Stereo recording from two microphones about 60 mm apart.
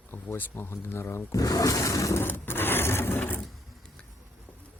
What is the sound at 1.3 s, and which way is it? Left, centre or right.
Roaring cats, left.